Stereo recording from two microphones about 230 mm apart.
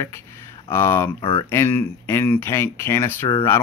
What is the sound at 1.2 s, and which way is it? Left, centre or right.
Speech, left.